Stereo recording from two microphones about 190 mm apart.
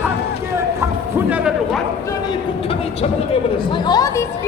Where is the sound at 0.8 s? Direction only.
10° right (ahead or behind).